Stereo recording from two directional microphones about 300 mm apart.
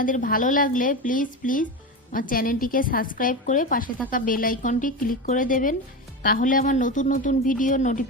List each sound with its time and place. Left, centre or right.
0.0 s a woman's voice: left